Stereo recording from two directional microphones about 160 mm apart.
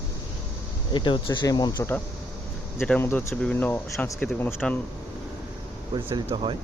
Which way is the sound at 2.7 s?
5° left (ahead or behind).